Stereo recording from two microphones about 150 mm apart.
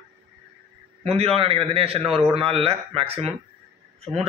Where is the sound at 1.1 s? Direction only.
40° right (ahead or behind).